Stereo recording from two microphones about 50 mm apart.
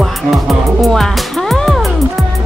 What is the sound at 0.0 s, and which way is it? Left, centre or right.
Music, centre.